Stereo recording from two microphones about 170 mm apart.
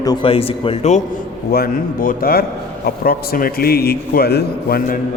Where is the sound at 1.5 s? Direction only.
60° left (ahead or behind).